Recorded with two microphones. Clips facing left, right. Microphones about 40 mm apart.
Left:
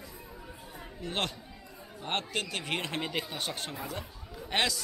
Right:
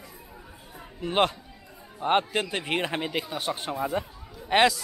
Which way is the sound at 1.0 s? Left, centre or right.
Right.